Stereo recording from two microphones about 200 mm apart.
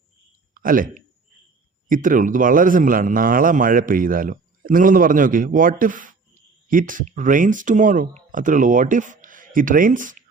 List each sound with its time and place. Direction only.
0.5 s a man's voice: 45° right (ahead or behind)